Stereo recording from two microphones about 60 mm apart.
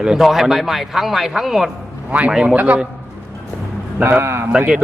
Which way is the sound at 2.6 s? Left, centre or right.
Right.